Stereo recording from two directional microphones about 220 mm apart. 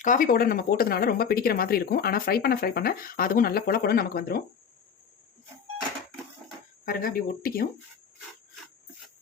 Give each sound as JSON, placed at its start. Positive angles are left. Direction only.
{"t": 0.0, "sound": "speech", "side_deg": 40}
{"t": 6.8, "sound": "speech", "side_deg": 40}